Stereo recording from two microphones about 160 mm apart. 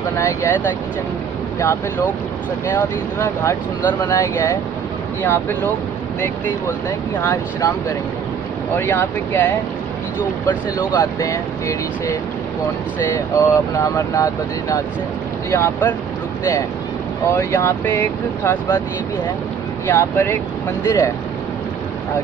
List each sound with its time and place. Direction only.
0.2 s speech: 20° left (ahead or behind)
2.7 s speech: 15° left (ahead or behind)
7.2 s speech: 20° left (ahead or behind)
8.7 s speech: 15° left (ahead or behind)
10.8 s speech: 20° left (ahead or behind)
17.4 s speech: 15° left (ahead or behind)
19.9 s speech: 15° left (ahead or behind)